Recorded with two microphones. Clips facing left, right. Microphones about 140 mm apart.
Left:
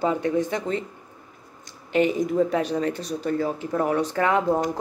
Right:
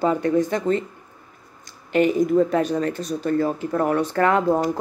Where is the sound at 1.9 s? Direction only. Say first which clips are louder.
Right 3 dB; 50° right (ahead or behind).